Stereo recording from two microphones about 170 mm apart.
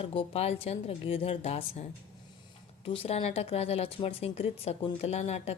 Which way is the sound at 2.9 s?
35° left (ahead or behind).